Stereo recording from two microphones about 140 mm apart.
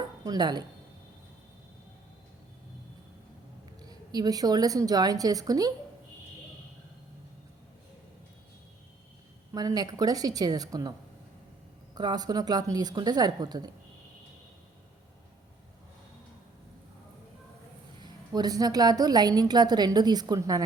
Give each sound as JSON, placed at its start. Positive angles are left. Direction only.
{"t": 0.3, "sound": "speech", "side_deg": -30}
{"t": 3.8, "sound": "a woman's voice", "side_deg": -30}
{"t": 9.5, "sound": "a woman's voice", "side_deg": -25}
{"t": 11.9, "sound": "a woman's voice", "side_deg": -30}
{"t": 18.0, "sound": "a woman's voice", "side_deg": -30}